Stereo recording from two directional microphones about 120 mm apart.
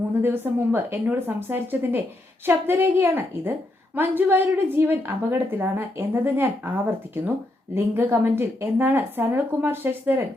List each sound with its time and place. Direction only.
0.2 s a woman's voice: 15° right (ahead or behind)